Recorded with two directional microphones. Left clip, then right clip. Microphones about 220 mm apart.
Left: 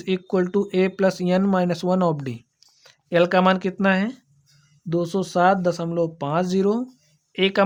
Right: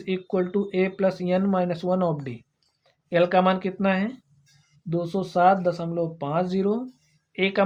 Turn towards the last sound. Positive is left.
turn(degrees=40)  # may be behind; listen again after turning